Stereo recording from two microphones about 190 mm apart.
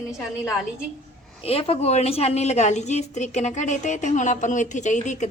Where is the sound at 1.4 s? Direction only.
30° left (ahead or behind).